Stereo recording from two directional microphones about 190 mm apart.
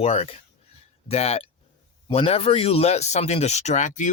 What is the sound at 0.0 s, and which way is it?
Speech, 30° left (ahead or behind).